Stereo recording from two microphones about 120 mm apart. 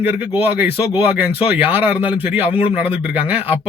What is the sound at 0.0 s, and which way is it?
Speech, 15° right (ahead or behind).